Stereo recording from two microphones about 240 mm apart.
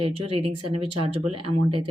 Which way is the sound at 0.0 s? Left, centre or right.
Right.